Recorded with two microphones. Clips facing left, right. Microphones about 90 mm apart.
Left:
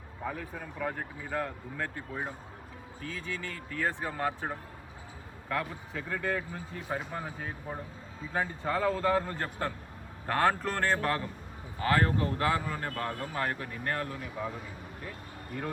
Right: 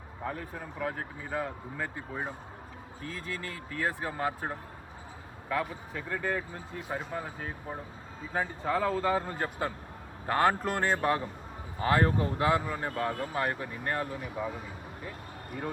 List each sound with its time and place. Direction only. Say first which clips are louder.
0.3 s speech: even; 5° right (ahead or behind)